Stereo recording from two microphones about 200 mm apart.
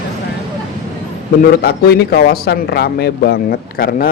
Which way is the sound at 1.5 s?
50° left (ahead or behind).